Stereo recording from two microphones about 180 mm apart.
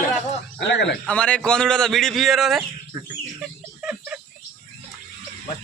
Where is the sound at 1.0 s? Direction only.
5° left (ahead or behind).